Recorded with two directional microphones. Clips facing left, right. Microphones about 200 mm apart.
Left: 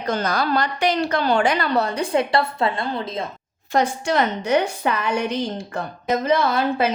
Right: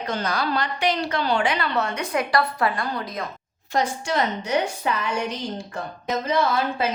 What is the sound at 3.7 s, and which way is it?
A woman's voice, 60° left (ahead or behind).